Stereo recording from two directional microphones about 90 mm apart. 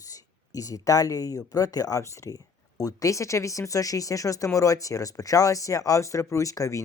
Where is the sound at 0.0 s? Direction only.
40° left (ahead or behind).